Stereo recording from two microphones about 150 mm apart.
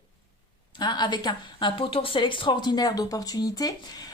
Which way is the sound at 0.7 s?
30° left (ahead or behind).